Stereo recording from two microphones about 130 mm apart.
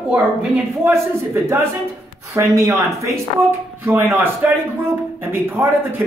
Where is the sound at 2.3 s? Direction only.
20° right (ahead or behind).